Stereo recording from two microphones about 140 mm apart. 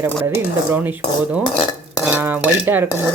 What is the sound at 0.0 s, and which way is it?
Cutlery, 15° right (ahead or behind).